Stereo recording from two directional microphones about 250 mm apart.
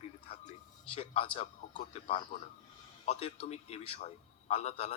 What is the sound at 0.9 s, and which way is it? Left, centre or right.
A man's voice, left.